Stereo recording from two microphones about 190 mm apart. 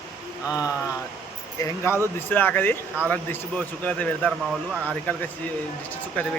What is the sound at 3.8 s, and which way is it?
Speech, 5° left (ahead or behind).